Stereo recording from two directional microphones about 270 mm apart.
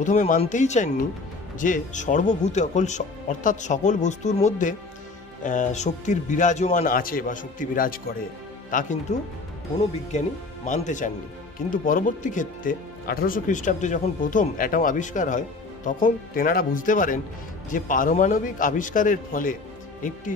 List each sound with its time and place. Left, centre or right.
0.0 s speech: left